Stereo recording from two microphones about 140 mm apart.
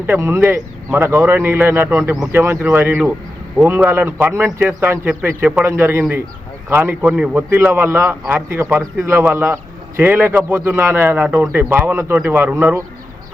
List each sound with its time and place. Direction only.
0.0 s a man's voice: 15° right (ahead or behind)